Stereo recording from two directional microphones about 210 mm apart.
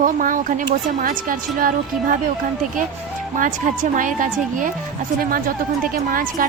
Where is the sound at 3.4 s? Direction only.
40° right (ahead or behind).